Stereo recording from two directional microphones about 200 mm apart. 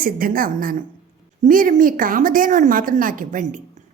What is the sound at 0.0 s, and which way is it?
A woman's voice, 45° right (ahead or behind).